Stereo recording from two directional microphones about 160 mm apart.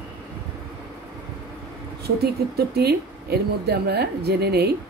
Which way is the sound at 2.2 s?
85° right.